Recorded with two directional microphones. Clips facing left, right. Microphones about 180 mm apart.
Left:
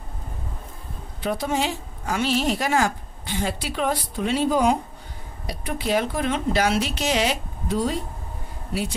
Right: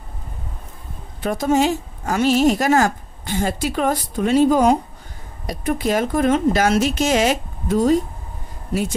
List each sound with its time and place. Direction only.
1.2 s a woman's voice: 45° right (ahead or behind)